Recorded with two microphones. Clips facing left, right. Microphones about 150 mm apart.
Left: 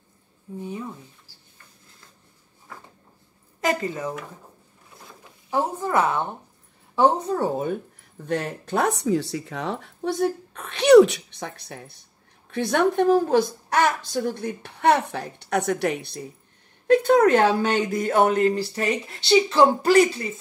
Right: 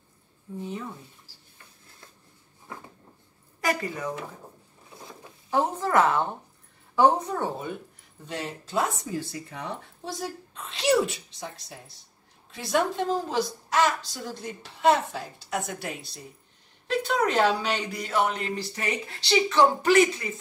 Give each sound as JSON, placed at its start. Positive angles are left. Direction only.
{"t": 0.6, "sound": "speech", "side_deg": 10}
{"t": 3.6, "sound": "a woman's voice", "side_deg": 25}
{"t": 5.8, "sound": "speech", "side_deg": 15}
{"t": 7.0, "sound": "a woman's voice", "side_deg": 30}
{"t": 7.5, "sound": "a woman's voice", "side_deg": 45}
{"t": 8.3, "sound": "a woman's voice", "side_deg": 55}
{"t": 16.8, "sound": "a woman's voice", "side_deg": 50}
{"t": 18.5, "sound": "speech", "side_deg": 35}